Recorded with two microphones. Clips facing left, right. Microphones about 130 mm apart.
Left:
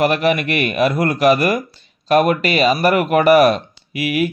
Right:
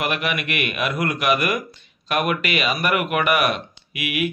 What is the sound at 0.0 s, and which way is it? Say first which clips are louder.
Speech: left 9 dB; 35° left (ahead or behind).